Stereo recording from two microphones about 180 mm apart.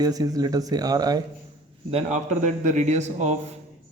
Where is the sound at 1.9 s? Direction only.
40° right (ahead or behind).